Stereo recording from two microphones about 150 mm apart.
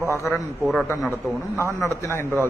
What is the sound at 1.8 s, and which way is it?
Speech, 20° left (ahead or behind).